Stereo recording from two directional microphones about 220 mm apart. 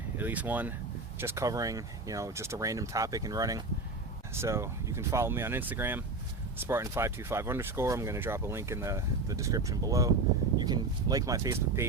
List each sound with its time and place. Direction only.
0.2 s speech: 10° right (ahead or behind)